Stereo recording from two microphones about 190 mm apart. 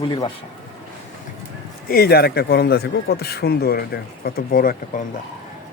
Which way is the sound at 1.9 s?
55° left (ahead or behind).